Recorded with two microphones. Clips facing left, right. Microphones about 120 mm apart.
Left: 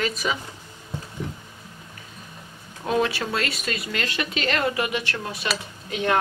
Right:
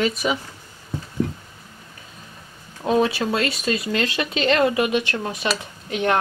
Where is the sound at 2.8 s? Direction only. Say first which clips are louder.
Right 4 dB; 20° right (ahead or behind).